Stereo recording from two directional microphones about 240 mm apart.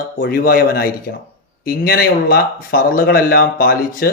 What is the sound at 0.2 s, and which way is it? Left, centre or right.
Speech, left.